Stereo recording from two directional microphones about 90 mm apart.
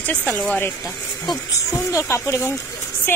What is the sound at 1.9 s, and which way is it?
Speech, 35° left (ahead or behind).